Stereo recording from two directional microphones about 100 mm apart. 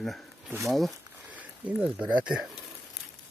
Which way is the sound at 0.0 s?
Centre (ahead or behind).